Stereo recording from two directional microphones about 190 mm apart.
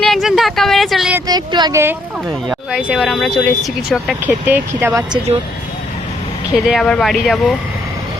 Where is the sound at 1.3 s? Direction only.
20° right (ahead or behind).